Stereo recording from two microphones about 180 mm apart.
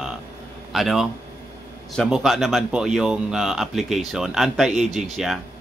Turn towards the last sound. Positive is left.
turn(degrees=0)  # may be behind; listen again after turning